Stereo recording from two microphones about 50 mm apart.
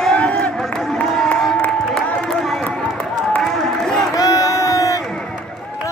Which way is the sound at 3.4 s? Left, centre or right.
Centre.